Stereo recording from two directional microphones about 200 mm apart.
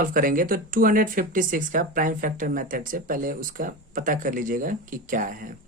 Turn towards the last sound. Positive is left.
turn(degrees=-45)  # may be behind; listen again after turning